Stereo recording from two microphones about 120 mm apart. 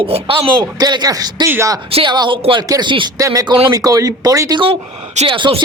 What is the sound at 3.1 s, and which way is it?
Speech, 30° right (ahead or behind).